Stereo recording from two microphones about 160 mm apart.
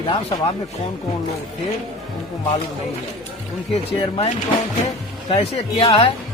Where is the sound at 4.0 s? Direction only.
35° left (ahead or behind).